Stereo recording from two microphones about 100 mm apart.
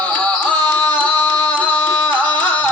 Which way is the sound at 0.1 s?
10° left (ahead or behind).